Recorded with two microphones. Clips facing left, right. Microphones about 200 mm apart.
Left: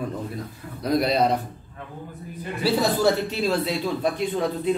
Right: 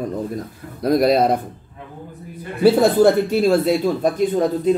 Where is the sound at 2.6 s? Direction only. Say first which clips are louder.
Right 9 dB; 55° right (ahead or behind).